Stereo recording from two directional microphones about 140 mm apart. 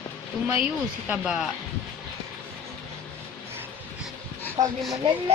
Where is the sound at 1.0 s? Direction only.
5° right (ahead or behind).